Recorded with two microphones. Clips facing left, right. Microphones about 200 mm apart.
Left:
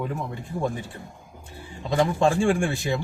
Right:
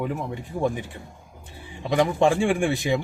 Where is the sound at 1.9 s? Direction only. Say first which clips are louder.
Right 1 dB; 15° right (ahead or behind).